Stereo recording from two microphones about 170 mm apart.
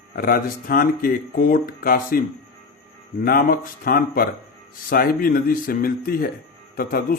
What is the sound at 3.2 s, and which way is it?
Speech, 60° left (ahead or behind).